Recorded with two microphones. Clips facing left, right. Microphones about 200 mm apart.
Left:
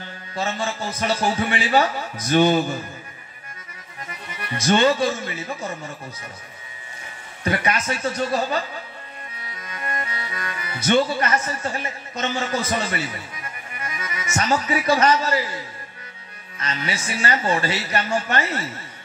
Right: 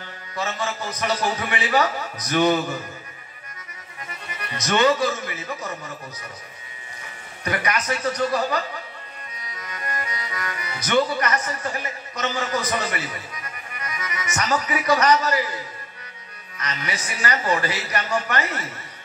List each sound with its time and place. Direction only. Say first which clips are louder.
0.3 s a man's voice: left 2 dB; 30° left (ahead or behind)
4.6 s a man's voice: left 1 dB; 30° left (ahead or behind)
7.4 s a man's voice: left 2 dB; 25° left (ahead or behind)